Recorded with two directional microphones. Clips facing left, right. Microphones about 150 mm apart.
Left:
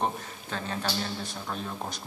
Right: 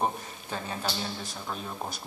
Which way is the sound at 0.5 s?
10° right (ahead or behind).